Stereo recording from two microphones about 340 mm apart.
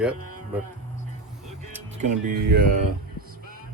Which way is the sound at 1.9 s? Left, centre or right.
Right.